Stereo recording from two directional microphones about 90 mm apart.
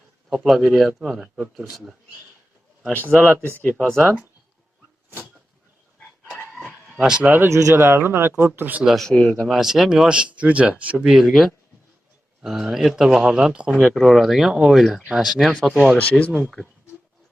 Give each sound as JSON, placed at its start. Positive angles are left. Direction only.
{"t": 0.3, "sound": "speech", "side_deg": 0}
{"t": 3.1, "sound": "speech", "side_deg": 5}
{"t": 3.3, "sound": "speech", "side_deg": -25}
{"t": 3.6, "sound": "speech", "side_deg": 15}
{"t": 6.5, "sound": "a sound", "side_deg": -15}
{"t": 6.8, "sound": "a sound", "side_deg": 0}
{"t": 7.2, "sound": "speech", "side_deg": -20}
{"t": 8.8, "sound": "speech", "side_deg": -5}
{"t": 9.0, "sound": "speech", "side_deg": 10}
{"t": 9.5, "sound": "speech", "side_deg": -5}
{"t": 11.1, "sound": "speech", "side_deg": 0}
{"t": 16.0, "sound": "speech", "side_deg": 15}